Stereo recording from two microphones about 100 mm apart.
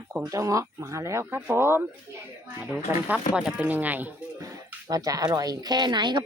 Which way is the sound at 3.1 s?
10° right (ahead or behind).